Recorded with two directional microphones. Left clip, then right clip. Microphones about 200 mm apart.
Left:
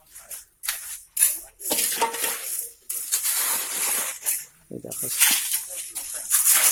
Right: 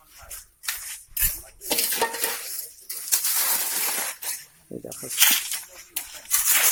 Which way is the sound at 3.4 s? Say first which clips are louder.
Right 1 dB; 40° right (ahead or behind).